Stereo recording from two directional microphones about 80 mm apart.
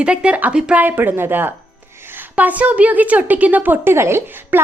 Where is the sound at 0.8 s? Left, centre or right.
Right.